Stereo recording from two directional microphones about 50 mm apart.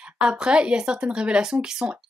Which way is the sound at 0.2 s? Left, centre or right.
Centre.